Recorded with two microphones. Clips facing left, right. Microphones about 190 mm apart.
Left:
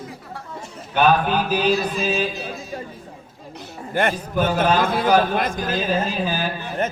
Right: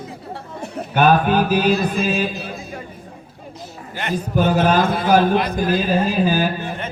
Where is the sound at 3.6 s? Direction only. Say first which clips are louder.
Left 9 dB; 50° left (ahead or behind).